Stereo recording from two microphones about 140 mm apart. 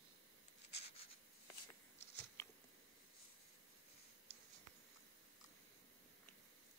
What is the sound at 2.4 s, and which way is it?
Biting, 20° left (ahead or behind).